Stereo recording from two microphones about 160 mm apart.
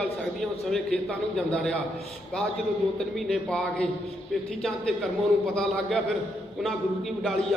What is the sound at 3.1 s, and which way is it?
Speech, centre (ahead or behind).